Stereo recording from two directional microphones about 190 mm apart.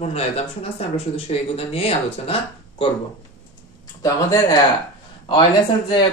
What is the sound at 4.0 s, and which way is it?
Speech, 15° left (ahead or behind).